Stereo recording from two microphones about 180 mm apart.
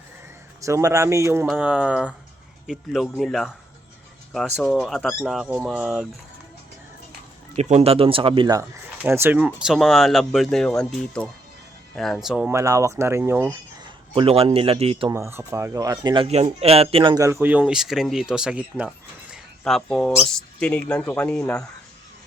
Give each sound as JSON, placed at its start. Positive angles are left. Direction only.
{"t": 0.6, "sound": "speech", "side_deg": -15}
{"t": 4.6, "sound": "speech", "side_deg": 0}
{"t": 7.5, "sound": "speech", "side_deg": -40}
{"t": 9.0, "sound": "speech", "side_deg": -10}
{"t": 12.5, "sound": "speech", "side_deg": -15}
{"t": 13.8, "sound": "a man's voice", "side_deg": -30}
{"t": 15.1, "sound": "speech", "side_deg": -15}
{"t": 17.2, "sound": "speech", "side_deg": -15}